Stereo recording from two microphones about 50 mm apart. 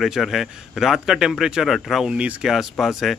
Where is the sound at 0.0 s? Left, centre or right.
Centre.